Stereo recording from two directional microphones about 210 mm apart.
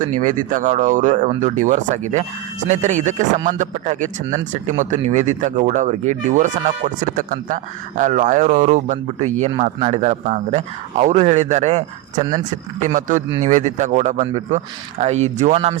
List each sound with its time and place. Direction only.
0.0 s speech: 40° right (ahead or behind)